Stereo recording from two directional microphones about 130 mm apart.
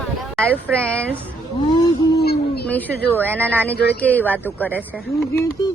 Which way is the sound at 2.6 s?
10° left (ahead or behind).